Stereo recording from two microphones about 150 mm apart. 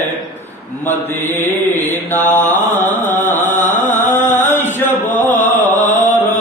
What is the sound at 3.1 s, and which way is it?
Music, 15° left (ahead or behind).